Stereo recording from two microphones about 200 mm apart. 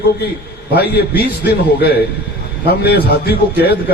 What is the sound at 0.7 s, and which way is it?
A man's voice, 55° left (ahead or behind).